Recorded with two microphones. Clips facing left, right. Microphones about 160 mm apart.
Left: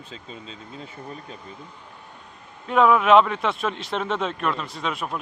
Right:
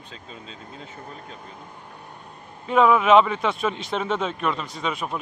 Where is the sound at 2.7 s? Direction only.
Centre (ahead or behind).